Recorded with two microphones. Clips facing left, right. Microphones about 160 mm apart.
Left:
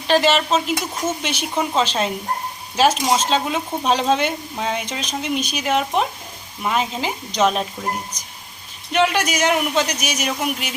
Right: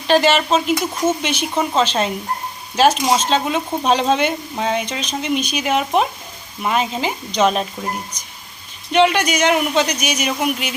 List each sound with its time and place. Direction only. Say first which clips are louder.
0.1 s speech: right 2 dB; centre (ahead or behind)
8.9 s speech: right 4 dB; centre (ahead or behind)